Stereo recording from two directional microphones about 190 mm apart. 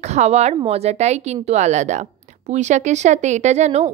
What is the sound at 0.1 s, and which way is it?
Speech, 35° right (ahead or behind).